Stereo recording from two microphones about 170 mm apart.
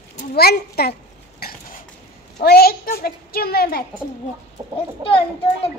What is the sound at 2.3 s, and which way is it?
A child's voice, 65° left (ahead or behind).